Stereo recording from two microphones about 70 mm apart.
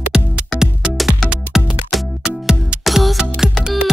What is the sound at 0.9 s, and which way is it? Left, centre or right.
Music, centre.